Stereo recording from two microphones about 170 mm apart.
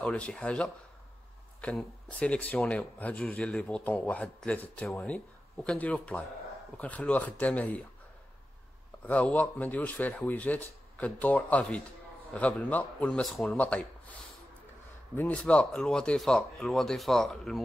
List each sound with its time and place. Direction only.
0.0 s speech: 5° left (ahead or behind)
9.0 s speech: 10° left (ahead or behind)
15.1 s speech: 10° left (ahead or behind)